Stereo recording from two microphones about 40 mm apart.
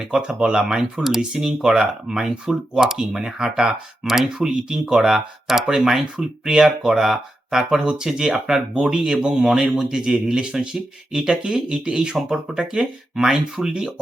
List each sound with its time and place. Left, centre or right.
0.0 s speech: centre
0.9 s speech: centre
6.7 s speech: centre